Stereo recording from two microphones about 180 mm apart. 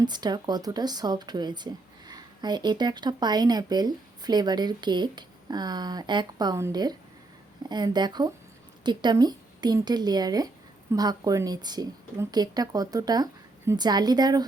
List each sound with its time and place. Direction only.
0.0 s speech: 25° right (ahead or behind)